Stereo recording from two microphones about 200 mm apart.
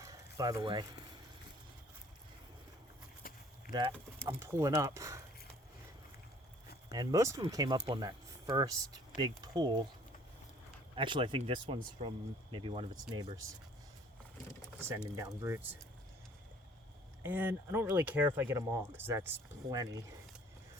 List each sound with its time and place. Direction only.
0.0 s a sound: 15° right (ahead or behind)
3.2 s a sound: 45° left (ahead or behind)
3.7 s speech: 20° right (ahead or behind)
6.9 s speech: 20° right (ahead or behind)
10.9 s speech: 25° right (ahead or behind)
14.8 s speech: 15° right (ahead or behind)
17.2 s speech: 10° right (ahead or behind)